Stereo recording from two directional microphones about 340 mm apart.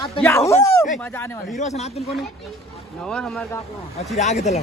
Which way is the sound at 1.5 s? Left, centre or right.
Centre.